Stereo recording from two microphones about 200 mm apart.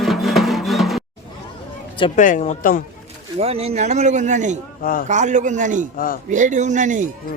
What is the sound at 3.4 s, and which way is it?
A man's voice, 30° right (ahead or behind).